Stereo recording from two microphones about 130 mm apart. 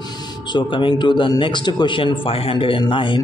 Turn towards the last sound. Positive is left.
turn(degrees=40)  # may be behind; listen again after turning